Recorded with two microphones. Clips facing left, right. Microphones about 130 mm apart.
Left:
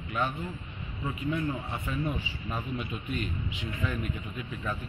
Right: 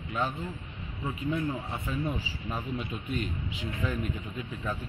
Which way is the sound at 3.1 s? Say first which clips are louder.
Right 2 dB; 35° right (ahead or behind).